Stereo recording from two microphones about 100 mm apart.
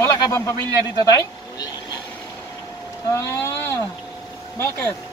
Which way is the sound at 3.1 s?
25° left (ahead or behind).